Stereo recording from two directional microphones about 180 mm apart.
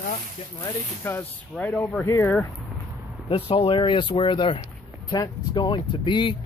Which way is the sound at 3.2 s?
30° left (ahead or behind).